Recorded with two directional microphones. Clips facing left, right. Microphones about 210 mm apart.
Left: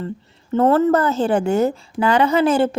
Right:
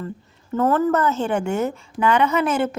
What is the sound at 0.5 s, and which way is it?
A woman's voice, 30° left (ahead or behind).